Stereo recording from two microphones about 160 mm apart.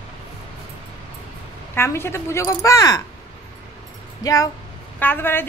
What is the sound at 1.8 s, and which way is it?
Speech, 15° left (ahead or behind).